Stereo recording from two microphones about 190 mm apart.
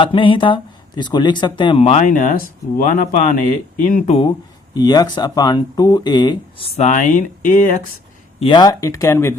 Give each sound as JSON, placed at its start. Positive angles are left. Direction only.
{"t": 0.0, "sound": "speech", "side_deg": 25}
{"t": 4.7, "sound": "speech", "side_deg": 20}
{"t": 6.8, "sound": "speech", "side_deg": 40}
{"t": 8.4, "sound": "speech", "side_deg": 25}